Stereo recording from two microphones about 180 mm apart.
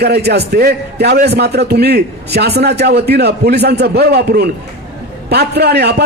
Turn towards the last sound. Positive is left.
turn(degrees=-65)  # may be behind; listen again after turning